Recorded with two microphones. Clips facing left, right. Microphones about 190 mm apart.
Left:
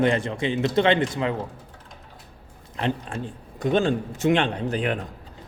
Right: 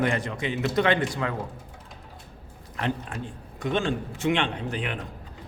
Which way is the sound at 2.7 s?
25° left (ahead or behind).